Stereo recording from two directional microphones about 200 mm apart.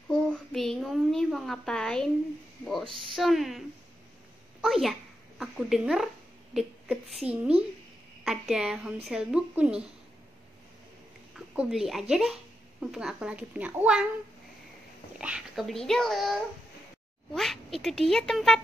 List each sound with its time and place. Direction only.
0.1 s a sound: 5° left (ahead or behind)
2.6 s a woman's voice: centre (ahead or behind)
11.3 s a woman's voice: centre (ahead or behind)
15.1 s a woman's voice: 5° right (ahead or behind)